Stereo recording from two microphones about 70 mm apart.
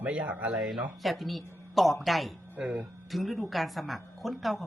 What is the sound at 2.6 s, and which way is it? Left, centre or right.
Speech, centre.